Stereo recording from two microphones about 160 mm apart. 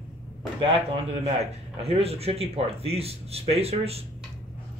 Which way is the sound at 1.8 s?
40° right (ahead or behind).